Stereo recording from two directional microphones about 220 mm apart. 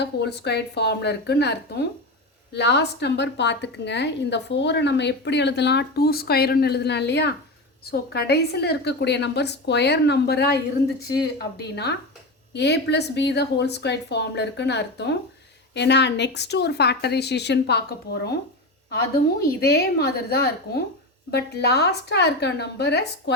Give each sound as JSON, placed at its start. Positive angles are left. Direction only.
{"t": 0.0, "sound": "a woman's voice", "side_deg": 50}
{"t": 19.4, "sound": "a woman's voice", "side_deg": 45}